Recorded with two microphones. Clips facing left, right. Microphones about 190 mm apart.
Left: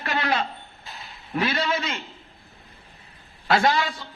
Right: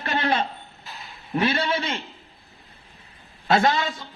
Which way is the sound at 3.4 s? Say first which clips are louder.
Right 1 dB; 25° right (ahead or behind).